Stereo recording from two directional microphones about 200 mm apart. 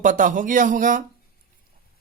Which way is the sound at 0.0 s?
40° right (ahead or behind).